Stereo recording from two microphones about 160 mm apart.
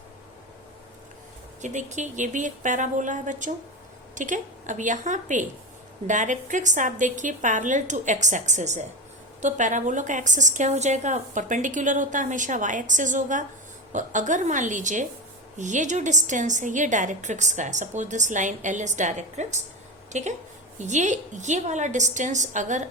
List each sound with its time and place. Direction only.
1.6 s a woman's voice: 50° right (ahead or behind)